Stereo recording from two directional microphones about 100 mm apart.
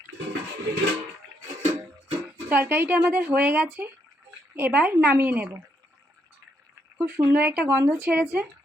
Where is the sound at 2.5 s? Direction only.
20° right (ahead or behind).